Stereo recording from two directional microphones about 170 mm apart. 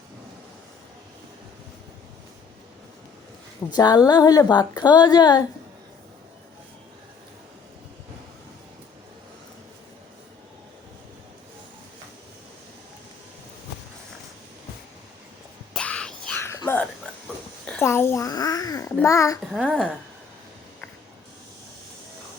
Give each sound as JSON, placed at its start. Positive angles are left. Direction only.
{"t": 3.8, "sound": "a woman's voice", "side_deg": 25}
{"t": 15.7, "sound": "whispering", "side_deg": 5}
{"t": 17.7, "sound": "babbling", "side_deg": 10}
{"t": 19.6, "sound": "speech", "side_deg": 5}